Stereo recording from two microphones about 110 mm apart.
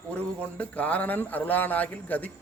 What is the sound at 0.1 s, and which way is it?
A man's voice, 15° left (ahead or behind).